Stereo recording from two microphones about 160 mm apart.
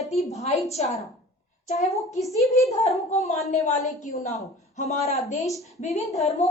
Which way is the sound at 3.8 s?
50° left (ahead or behind).